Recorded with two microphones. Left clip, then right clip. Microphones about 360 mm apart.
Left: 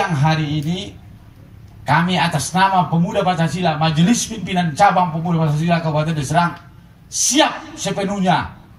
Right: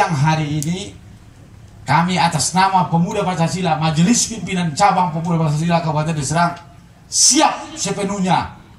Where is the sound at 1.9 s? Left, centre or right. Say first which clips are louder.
Right 1 dB; centre.